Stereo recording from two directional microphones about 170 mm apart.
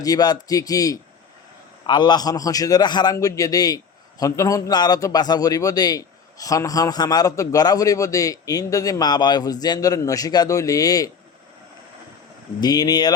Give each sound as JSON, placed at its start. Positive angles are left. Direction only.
{"t": 0.0, "sound": "a man's voice", "side_deg": 20}
{"t": 12.5, "sound": "a man's voice", "side_deg": 25}